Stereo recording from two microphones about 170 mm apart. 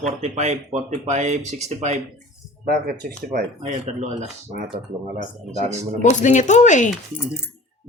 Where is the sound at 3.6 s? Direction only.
45° right (ahead or behind).